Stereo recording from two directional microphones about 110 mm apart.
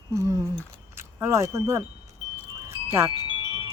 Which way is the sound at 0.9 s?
25° right (ahead or behind).